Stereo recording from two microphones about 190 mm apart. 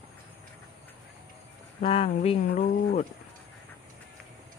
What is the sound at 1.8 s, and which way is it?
Speech, 30° left (ahead or behind).